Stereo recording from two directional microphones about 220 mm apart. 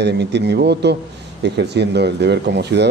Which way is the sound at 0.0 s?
50° right (ahead or behind).